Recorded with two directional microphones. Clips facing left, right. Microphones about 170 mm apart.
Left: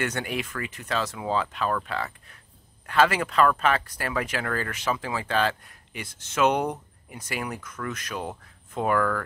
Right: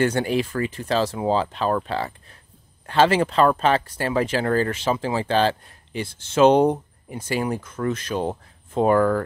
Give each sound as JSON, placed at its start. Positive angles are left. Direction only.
{"t": 0.0, "sound": "speech", "side_deg": -30}